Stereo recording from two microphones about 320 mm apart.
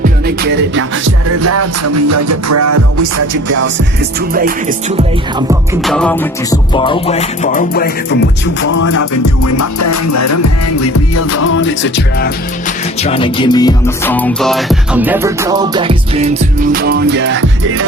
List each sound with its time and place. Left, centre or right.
0.0 s music: right
4.4 s music: right
5.5 s music: centre; by 8.2 s left
8.7 s music: left
13.0 s music: centre
16.8 s music: right